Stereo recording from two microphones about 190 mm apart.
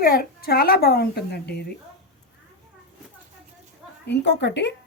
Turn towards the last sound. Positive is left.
turn(degrees=65)  # may be behind; listen again after turning